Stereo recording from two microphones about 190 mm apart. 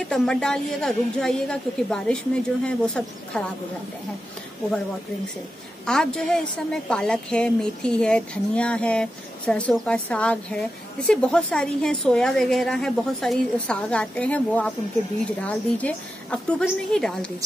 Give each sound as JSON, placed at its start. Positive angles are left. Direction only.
{"t": 0.0, "sound": "a woman's voice", "side_deg": 5}
{"t": 5.9, "sound": "a woman's voice", "side_deg": 5}